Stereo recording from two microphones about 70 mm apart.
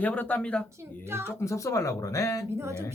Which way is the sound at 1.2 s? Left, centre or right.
Left.